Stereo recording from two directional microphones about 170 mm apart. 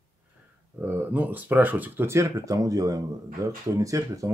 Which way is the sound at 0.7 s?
10° right (ahead or behind).